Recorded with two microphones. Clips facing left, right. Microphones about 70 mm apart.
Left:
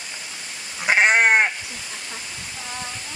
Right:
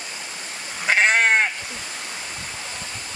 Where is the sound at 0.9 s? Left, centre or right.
Centre.